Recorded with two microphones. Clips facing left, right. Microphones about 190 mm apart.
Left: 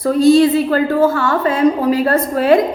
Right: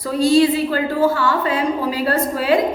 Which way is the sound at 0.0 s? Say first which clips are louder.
Left 4 dB; 45° left (ahead or behind).